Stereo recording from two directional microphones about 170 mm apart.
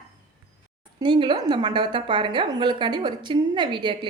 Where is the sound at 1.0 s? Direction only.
25° right (ahead or behind).